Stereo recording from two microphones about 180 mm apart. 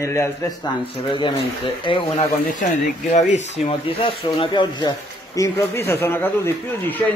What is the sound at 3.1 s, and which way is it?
Speech, 40° left (ahead or behind).